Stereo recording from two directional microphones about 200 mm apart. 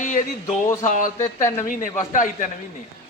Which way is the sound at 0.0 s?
40° left (ahead or behind).